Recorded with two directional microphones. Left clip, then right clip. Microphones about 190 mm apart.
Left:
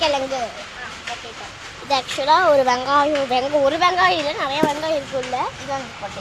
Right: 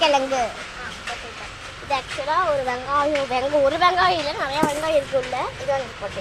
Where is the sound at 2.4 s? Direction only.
65° left (ahead or behind).